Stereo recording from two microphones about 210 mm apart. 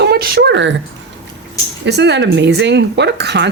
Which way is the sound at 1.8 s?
55° right (ahead or behind).